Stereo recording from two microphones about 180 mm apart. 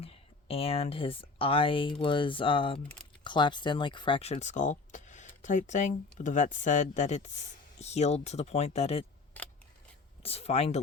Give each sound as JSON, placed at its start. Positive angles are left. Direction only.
{"t": 0.0, "sound": "speech", "side_deg": 35}
{"t": 10.2, "sound": "speech", "side_deg": 35}